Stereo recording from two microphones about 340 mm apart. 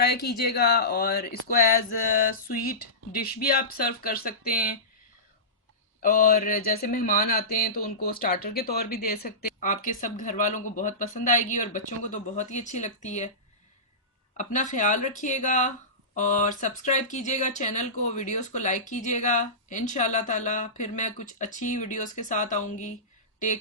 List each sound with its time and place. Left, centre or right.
0.0 s mantra: left
6.0 s mantra: left
14.3 s mantra: left